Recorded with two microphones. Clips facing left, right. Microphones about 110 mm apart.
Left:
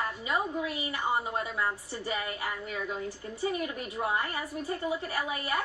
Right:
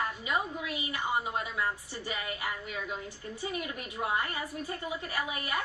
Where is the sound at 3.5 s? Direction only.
30° left (ahead or behind).